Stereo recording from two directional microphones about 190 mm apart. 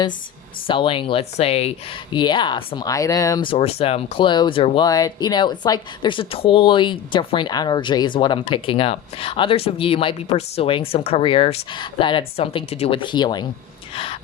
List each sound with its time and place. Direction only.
0.7 s speech: 25° left (ahead or behind)